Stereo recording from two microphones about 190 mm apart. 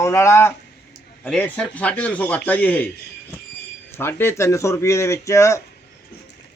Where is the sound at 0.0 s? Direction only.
15° left (ahead or behind).